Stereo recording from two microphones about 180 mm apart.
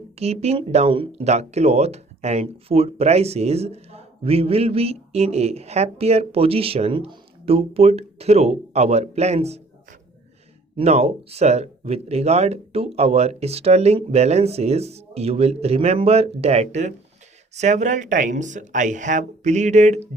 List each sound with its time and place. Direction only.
0.2 s speech: 35° right (ahead or behind)
10.8 s speech: 35° right (ahead or behind)